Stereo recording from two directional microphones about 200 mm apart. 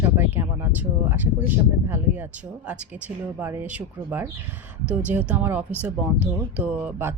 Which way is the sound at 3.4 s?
10° right (ahead or behind).